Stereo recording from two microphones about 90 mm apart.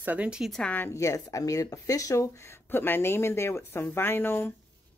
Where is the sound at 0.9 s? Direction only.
35° left (ahead or behind).